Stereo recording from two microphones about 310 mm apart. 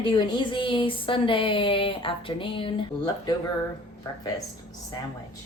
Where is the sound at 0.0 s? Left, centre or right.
Centre.